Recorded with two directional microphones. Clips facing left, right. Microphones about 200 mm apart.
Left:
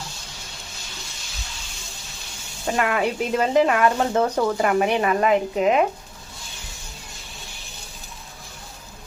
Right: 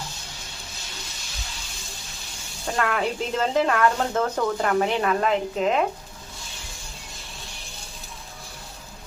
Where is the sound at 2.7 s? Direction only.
15° left (ahead or behind).